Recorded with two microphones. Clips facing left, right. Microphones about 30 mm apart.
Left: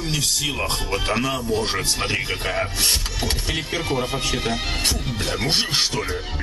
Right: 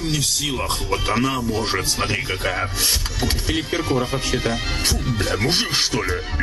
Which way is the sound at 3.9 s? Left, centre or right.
Centre.